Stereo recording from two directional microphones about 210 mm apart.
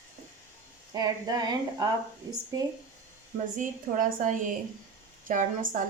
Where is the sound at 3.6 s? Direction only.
40° right (ahead or behind).